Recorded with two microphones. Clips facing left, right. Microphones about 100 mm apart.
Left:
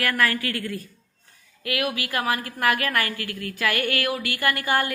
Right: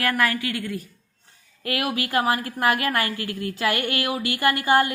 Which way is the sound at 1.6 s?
30° right (ahead or behind).